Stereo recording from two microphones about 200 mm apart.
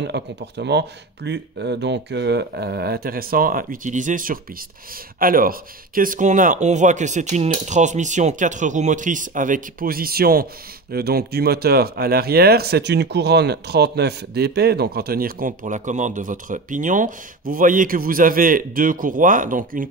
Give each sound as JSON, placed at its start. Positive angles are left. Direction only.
{"t": 0.0, "sound": "speech", "side_deg": -60}